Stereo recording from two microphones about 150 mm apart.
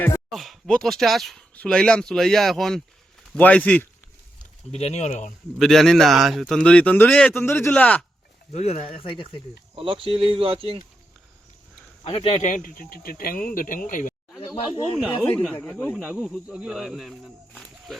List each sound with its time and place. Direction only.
0.3 s a man's voice: centre (ahead or behind)
4.7 s speech: 45° left (ahead or behind)
5.5 s a man's voice: centre (ahead or behind)
8.5 s speech: 45° left (ahead or behind)
9.7 s speech: 35° right (ahead or behind)
12.0 s speech: 40° left (ahead or behind); by 14.1 s 60° left (ahead or behind)
14.9 s speech: centre (ahead or behind)
15.5 s a man's voice: 10° left (ahead or behind)
16.0 s speech: 10° right (ahead or behind)